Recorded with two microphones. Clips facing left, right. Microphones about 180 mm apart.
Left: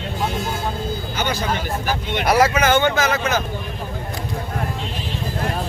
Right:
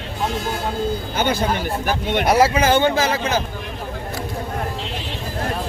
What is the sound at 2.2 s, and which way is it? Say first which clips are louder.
Speech: even; 30° right (ahead or behind).